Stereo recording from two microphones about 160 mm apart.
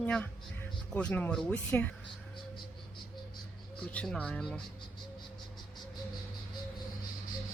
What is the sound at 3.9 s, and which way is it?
Speech, 5° left (ahead or behind).